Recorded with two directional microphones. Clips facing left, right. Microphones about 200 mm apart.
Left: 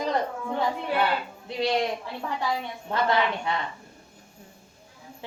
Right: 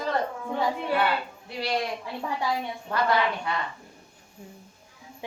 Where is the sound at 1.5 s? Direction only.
20° left (ahead or behind).